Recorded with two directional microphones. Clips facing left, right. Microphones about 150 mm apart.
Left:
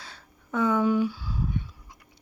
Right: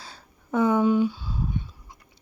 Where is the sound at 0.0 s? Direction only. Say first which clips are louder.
Right 2 dB; 35° right (ahead or behind).